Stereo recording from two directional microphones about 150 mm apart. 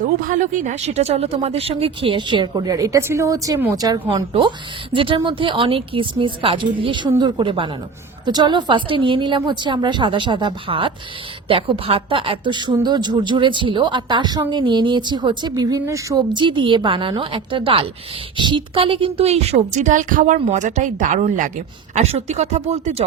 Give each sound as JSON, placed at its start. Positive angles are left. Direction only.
{"t": 0.3, "sound": "speech", "side_deg": -60}
{"t": 19.7, "sound": "a woman's voice", "side_deg": -55}